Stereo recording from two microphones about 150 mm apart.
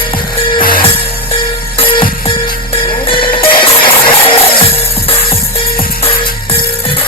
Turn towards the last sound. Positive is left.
turn(degrees=40)  # may be behind; listen again after turning